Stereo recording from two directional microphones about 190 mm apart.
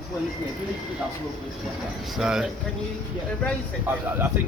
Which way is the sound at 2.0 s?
Centre (ahead or behind).